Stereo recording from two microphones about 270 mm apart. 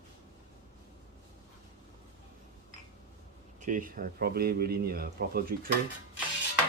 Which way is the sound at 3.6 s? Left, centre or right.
Right.